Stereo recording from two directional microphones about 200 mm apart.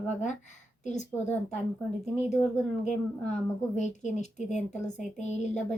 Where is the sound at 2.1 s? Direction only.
35° left (ahead or behind).